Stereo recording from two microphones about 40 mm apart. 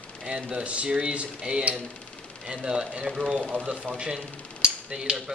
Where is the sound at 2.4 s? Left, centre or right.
Centre.